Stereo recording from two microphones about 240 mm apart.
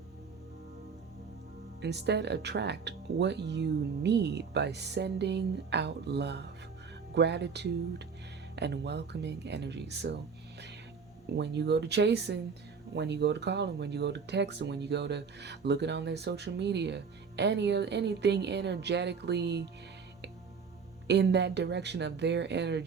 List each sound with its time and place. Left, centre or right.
1.8 s speech: right
11.3 s speech: right
21.1 s speech: right